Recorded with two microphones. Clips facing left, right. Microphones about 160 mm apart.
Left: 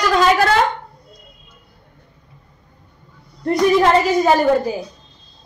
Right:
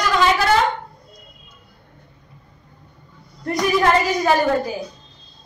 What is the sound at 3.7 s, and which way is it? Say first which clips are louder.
Speech: left 1 dB; 25° left (ahead or behind).